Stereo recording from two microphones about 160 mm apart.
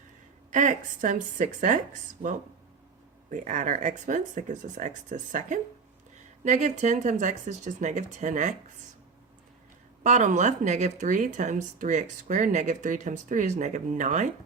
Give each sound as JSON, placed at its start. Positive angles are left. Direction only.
{"t": 0.5, "sound": "speech", "side_deg": -50}
{"t": 10.0, "sound": "speech", "side_deg": -50}